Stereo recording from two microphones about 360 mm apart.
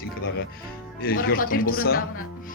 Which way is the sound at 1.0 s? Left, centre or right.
Left.